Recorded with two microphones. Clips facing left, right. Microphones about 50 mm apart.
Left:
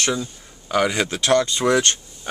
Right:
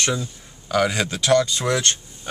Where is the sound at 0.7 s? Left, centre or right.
Centre.